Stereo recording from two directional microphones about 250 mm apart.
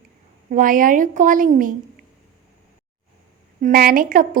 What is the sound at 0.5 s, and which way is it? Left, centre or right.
A woman's voice, right.